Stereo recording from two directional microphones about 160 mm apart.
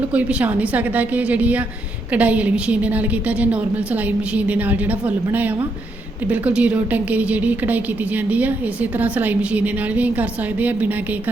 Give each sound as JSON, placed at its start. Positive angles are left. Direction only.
{"t": 0.1, "sound": "a woman's voice", "side_deg": -10}